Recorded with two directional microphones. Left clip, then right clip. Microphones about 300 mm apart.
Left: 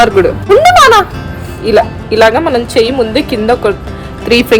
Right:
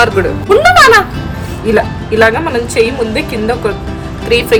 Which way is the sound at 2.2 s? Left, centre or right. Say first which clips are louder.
Left 3 dB; centre.